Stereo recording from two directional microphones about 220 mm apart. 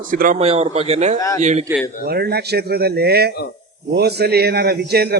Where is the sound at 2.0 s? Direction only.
45° right (ahead or behind).